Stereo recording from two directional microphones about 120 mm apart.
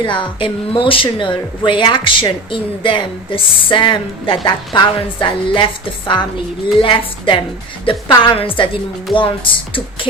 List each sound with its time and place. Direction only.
0.0 s a woman's voice: 40° left (ahead or behind)